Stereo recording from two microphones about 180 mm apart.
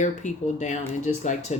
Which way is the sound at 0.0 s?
40° left (ahead or behind).